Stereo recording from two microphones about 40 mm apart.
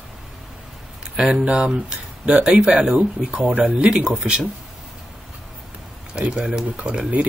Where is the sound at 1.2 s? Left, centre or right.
Centre.